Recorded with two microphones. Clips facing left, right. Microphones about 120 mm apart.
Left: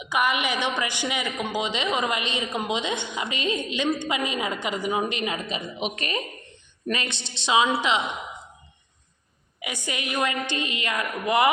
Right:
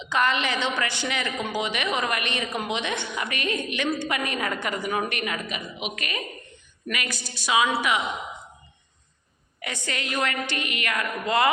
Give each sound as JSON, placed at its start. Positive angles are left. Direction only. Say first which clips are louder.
{"t": 0.0, "sound": "a woman's voice", "louder": "even", "side_deg": 10}
{"t": 9.6, "sound": "a woman's voice", "louder": "even", "side_deg": 10}